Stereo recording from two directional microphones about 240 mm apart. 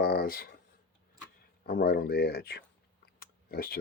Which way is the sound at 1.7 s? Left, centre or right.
Left.